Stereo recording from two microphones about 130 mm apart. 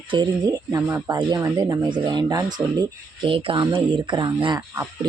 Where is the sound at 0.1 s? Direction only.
35° right (ahead or behind).